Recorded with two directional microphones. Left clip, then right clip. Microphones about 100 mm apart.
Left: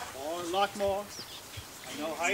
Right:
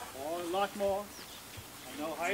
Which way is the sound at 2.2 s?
15° left (ahead or behind).